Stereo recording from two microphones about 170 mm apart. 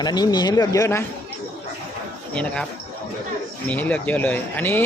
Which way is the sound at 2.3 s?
5° left (ahead or behind).